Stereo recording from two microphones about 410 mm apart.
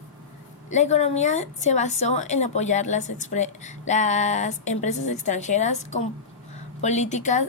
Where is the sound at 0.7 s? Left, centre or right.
Centre.